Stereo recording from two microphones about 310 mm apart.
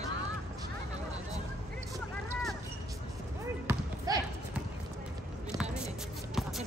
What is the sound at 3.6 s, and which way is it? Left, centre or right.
Basketball bounce, centre.